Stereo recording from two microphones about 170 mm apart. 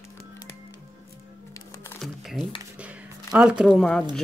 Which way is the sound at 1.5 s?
20° left (ahead or behind).